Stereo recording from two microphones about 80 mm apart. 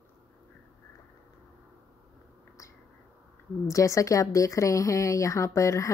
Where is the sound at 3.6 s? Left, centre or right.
Left.